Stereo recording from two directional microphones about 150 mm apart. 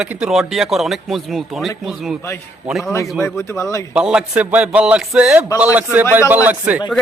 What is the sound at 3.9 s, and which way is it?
A man's voice, 5° right (ahead or behind).